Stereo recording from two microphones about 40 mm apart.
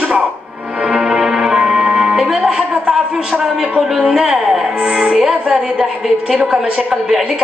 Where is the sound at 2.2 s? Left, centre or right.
Centre.